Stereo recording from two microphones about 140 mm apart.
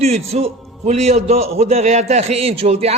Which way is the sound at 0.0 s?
50° right (ahead or behind).